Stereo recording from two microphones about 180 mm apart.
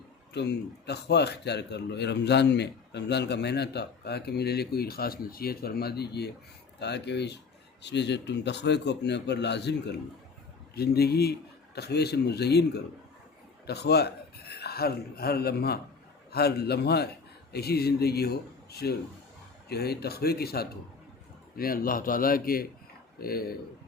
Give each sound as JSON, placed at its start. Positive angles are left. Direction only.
{"t": 0.3, "sound": "a man's voice", "side_deg": 65}
{"t": 10.8, "sound": "a man's voice", "side_deg": 60}